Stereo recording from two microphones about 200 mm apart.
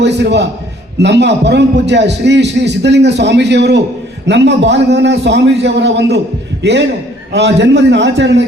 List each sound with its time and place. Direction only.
0.0 s a man's voice: 60° right (ahead or behind)